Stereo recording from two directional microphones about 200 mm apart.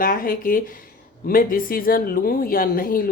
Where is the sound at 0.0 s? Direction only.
45° left (ahead or behind).